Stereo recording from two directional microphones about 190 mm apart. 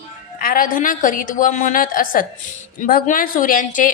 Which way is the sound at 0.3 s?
45° left (ahead or behind).